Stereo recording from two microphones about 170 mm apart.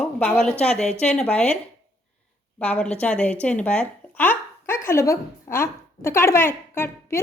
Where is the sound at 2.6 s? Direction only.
5° left (ahead or behind).